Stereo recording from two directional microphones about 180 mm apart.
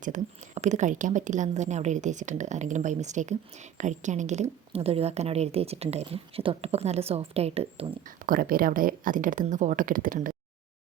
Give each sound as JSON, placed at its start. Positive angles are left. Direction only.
{"t": 0.0, "sound": "speech", "side_deg": -45}
{"t": 8.0, "sound": "speech", "side_deg": -50}